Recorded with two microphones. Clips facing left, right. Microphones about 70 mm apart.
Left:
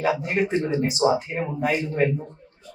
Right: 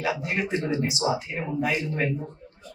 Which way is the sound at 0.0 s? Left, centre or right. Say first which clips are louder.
Left 5 dB; left.